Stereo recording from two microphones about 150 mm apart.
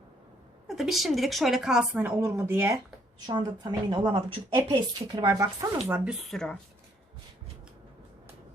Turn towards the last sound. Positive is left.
turn(degrees=5)  # may be behind; listen again after turning